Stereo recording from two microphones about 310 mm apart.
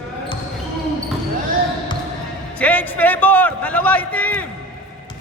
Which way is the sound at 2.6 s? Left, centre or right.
Centre.